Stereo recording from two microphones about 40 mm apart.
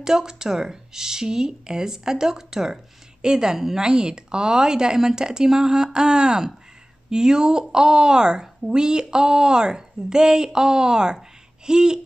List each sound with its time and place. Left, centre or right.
0.0 s a woman's voice: centre